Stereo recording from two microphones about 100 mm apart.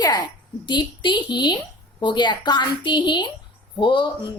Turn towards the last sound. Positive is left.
turn(degrees=55)  # may be behind; listen again after turning